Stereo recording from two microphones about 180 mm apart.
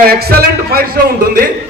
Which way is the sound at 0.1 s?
60° right (ahead or behind).